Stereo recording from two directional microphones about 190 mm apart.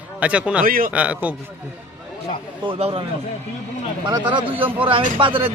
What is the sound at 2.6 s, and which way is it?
Speech, 30° right (ahead or behind).